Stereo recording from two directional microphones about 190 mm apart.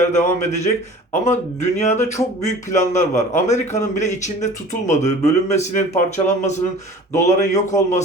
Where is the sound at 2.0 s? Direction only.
15° left (ahead or behind).